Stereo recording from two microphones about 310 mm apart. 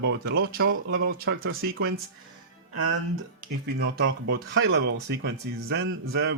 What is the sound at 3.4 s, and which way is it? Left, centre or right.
Speech, right.